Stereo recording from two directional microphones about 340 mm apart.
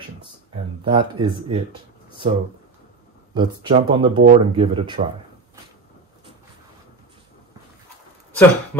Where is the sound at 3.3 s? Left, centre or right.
Centre.